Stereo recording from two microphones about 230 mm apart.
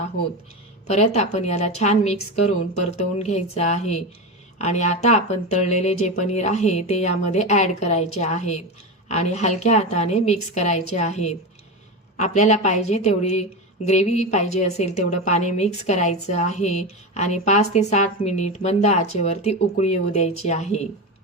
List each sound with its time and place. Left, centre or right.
0.9 s speech: left